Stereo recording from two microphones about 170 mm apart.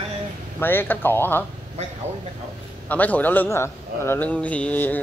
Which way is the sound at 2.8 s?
10° left (ahead or behind).